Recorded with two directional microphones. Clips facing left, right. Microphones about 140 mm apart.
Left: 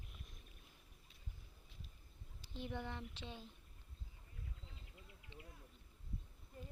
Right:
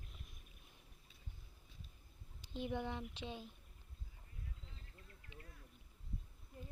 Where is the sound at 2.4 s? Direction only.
15° right (ahead or behind).